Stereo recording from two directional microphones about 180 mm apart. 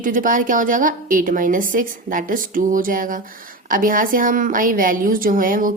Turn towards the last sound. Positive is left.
turn(degrees=-50)  # may be behind; listen again after turning